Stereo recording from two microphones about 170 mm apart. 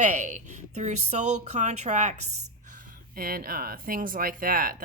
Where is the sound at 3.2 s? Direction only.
60° right (ahead or behind).